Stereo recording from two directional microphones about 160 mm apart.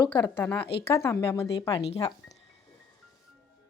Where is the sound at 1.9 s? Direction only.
40° left (ahead or behind).